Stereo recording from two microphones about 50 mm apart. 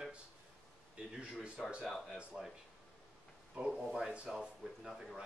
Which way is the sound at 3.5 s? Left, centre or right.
Centre.